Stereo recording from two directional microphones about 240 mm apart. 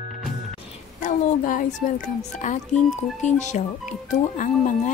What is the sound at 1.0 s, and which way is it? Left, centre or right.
Speech, left.